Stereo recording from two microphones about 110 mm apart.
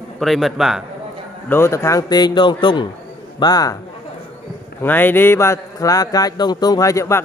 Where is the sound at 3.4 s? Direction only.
35° left (ahead or behind).